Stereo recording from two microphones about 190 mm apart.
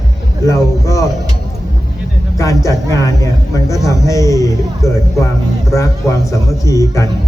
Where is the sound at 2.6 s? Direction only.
15° left (ahead or behind).